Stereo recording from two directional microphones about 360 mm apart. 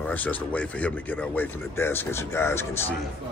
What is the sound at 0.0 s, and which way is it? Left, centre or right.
A man's voice, centre.